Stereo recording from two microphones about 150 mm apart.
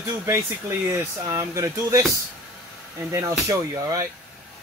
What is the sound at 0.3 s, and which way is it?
Speech, 15° right (ahead or behind).